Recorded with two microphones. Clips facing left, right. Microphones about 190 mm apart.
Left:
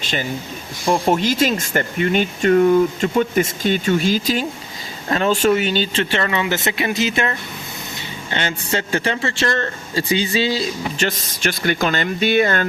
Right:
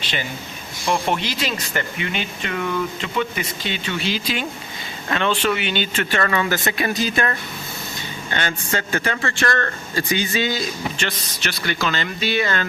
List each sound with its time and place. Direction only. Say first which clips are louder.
0.0 s speech: left 4 dB; 45° left (ahead or behind)